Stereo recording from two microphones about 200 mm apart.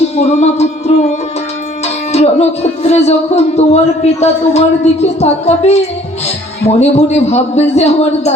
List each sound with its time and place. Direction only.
0.2 s speech: 35° left (ahead or behind)
2.1 s speech: 30° left (ahead or behind)